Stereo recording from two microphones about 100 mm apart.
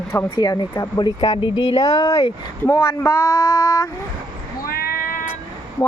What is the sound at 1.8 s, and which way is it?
Speech, 35° left (ahead or behind).